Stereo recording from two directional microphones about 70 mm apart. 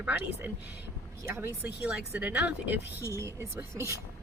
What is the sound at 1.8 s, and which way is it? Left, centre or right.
Speech, centre.